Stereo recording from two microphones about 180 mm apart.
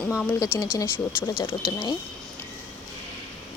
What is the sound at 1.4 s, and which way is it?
Speech, 30° left (ahead or behind).